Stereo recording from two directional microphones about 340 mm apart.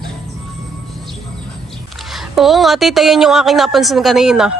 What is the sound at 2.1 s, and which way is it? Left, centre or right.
A woman's voice, centre.